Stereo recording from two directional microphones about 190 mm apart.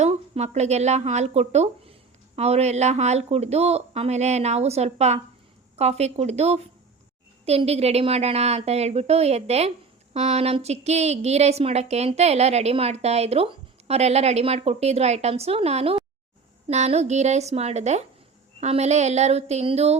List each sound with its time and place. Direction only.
0.0 s a woman's voice: 35° right (ahead or behind)